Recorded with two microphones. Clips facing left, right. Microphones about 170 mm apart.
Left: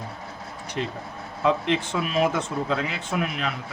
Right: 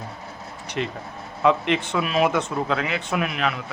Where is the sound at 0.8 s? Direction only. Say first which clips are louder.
Right 2 dB; 70° right (ahead or behind).